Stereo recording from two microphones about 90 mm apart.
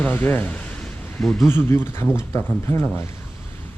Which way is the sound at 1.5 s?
25° left (ahead or behind).